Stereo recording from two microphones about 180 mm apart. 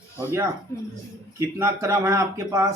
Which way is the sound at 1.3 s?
15° right (ahead or behind).